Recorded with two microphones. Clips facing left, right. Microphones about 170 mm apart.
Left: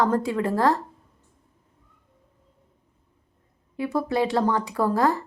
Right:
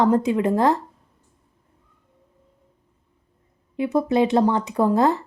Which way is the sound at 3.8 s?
20° right (ahead or behind).